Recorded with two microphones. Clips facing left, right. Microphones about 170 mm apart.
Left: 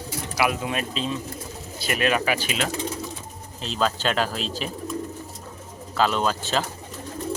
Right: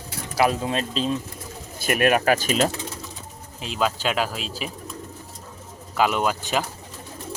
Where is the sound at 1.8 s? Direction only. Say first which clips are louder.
Right 4 dB; 50° right (ahead or behind).